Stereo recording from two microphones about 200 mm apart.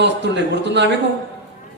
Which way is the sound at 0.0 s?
60° right (ahead or behind).